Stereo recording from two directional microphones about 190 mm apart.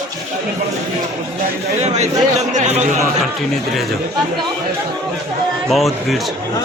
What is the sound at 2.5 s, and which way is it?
Speech, 40° right (ahead or behind).